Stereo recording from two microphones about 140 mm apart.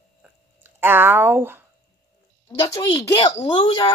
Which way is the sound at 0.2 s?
15° right (ahead or behind).